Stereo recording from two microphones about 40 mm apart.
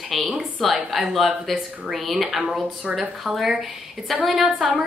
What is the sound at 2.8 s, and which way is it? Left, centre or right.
Speech, right.